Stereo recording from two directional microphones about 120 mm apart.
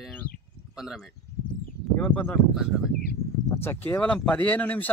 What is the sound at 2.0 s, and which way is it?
Speech, 15° left (ahead or behind).